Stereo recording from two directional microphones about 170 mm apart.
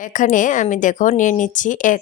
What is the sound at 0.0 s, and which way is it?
Speech, 50° left (ahead or behind).